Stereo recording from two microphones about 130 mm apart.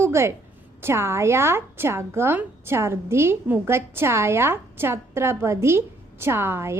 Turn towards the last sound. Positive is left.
turn(degrees=-20)  # may be behind; listen again after turning